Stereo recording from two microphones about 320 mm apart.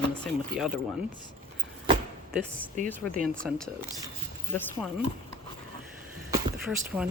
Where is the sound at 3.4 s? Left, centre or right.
Centre.